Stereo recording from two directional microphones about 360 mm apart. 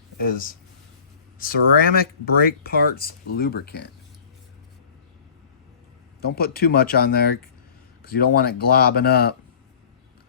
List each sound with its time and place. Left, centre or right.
0.3 s speech: left
6.2 s speech: left